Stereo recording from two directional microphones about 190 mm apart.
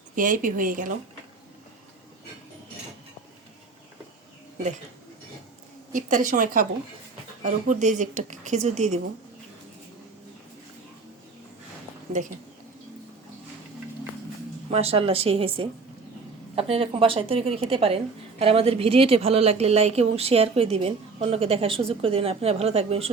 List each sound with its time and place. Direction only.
0.2 s speech: 45° right (ahead or behind)
5.9 s a woman's voice: 45° right (ahead or behind)
14.7 s a woman's voice: 30° right (ahead or behind)